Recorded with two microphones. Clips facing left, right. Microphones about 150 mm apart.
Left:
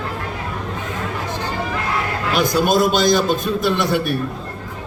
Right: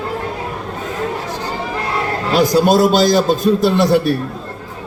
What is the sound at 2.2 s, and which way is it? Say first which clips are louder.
A man's voice: right 5 dB; 35° right (ahead or behind).